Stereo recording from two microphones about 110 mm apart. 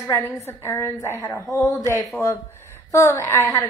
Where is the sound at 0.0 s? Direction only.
25° left (ahead or behind).